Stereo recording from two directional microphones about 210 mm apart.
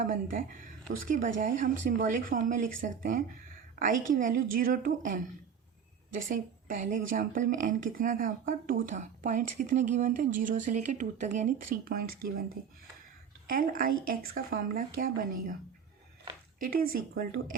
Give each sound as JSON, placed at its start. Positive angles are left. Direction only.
{"t": 0.0, "sound": "speech", "side_deg": -40}
{"t": 6.1, "sound": "speech", "side_deg": -40}
{"t": 13.5, "sound": "speech", "side_deg": -40}
{"t": 16.6, "sound": "speech", "side_deg": -45}